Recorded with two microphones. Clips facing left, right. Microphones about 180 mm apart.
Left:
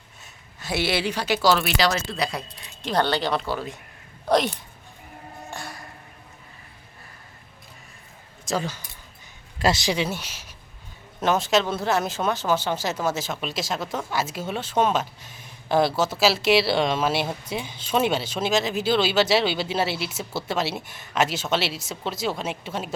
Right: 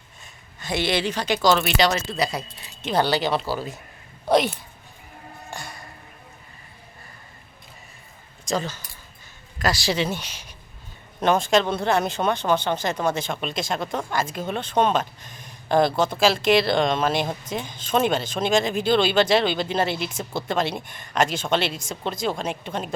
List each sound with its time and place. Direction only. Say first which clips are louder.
0.6 s speech: right 1 dB; 5° left (ahead or behind)
5.5 s music: even; centre (ahead or behind)
8.4 s speech: right 1 dB; 10° left (ahead or behind)
9.6 s a woman's voice: left 1 dB; 25° left (ahead or behind); by 23.0 s 5° left (ahead or behind)